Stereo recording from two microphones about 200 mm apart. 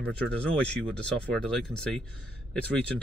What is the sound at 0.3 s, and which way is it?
Speech, 5° left (ahead or behind).